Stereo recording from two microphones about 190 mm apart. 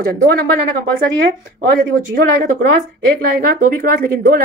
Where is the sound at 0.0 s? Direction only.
50° right (ahead or behind).